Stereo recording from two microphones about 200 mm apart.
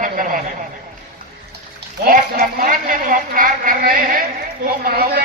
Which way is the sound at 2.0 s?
45° right (ahead or behind).